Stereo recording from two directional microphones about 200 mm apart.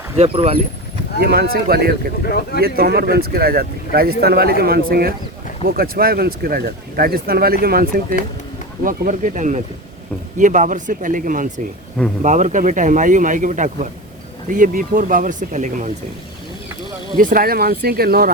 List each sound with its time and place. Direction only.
0.2 s speech: 30° right (ahead or behind)
1.2 s speech: 50° right (ahead or behind)
2.2 s speech: 55° left (ahead or behind)
2.6 s speech: 50° right (ahead or behind)
17.2 s speech: 45° right (ahead or behind)